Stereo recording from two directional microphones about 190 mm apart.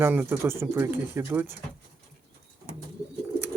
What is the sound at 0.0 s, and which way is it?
Speech, 10° right (ahead or behind).